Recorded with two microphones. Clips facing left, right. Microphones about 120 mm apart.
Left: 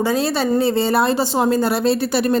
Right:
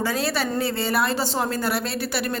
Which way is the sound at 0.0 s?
20° left (ahead or behind).